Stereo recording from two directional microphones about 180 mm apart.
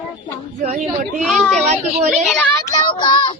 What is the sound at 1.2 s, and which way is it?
A woman's voice, 5° left (ahead or behind).